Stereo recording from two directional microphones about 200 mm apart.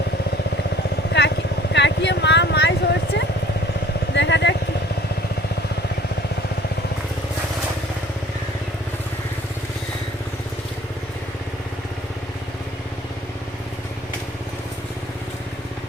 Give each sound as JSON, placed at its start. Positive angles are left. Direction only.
{"t": 1.7, "sound": "vehicle", "side_deg": 60}